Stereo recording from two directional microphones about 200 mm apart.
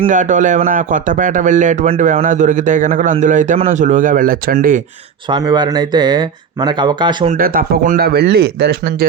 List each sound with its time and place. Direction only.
0.1 s a man's voice: 40° right (ahead or behind)
5.3 s speech: 20° right (ahead or behind)
7.3 s speech: 45° right (ahead or behind)